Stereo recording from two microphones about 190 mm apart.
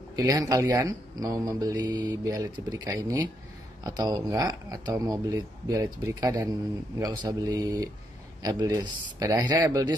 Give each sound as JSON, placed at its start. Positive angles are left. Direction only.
{"t": 0.1, "sound": "speech", "side_deg": -20}